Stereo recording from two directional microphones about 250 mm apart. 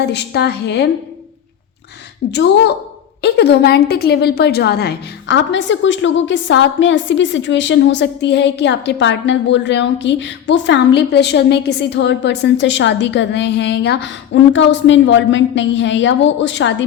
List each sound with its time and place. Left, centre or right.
0.1 s a woman's voice: left
2.3 s a woman's voice: left